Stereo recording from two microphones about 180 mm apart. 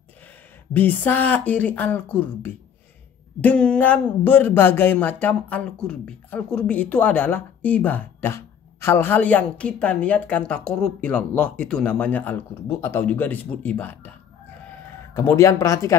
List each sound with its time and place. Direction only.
0.7 s speech: 10° left (ahead or behind)